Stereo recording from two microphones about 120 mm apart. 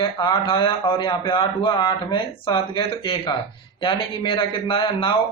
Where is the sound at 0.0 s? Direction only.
40° left (ahead or behind).